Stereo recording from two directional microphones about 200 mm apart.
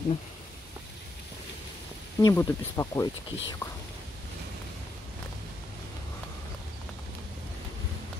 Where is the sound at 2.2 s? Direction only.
15° left (ahead or behind).